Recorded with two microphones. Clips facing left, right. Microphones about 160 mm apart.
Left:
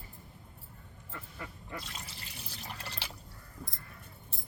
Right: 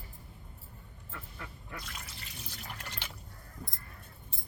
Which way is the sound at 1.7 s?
30° left (ahead or behind).